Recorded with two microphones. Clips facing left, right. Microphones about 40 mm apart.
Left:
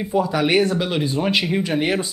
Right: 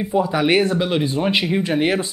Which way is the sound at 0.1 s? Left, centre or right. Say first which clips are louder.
Right 1 dB; centre.